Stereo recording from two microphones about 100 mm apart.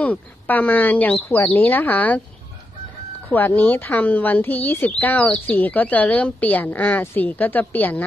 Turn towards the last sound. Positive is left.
turn(degrees=15)  # may be behind; listen again after turning